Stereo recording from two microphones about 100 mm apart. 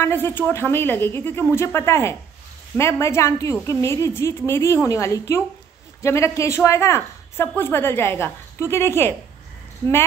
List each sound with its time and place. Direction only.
0.0 s a woman's voice: 20° left (ahead or behind)